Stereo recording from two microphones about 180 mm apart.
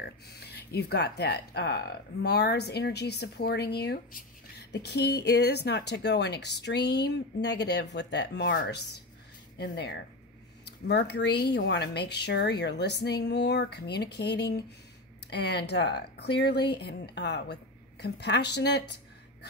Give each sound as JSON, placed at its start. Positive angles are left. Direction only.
{"t": 0.0, "sound": "a woman's voice", "side_deg": 65}